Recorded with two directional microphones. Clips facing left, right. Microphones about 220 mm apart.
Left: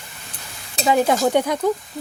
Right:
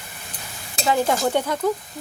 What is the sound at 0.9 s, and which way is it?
Speech, 15° left (ahead or behind).